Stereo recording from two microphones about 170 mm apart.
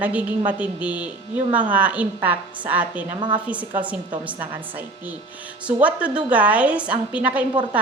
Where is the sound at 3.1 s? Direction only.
30° right (ahead or behind).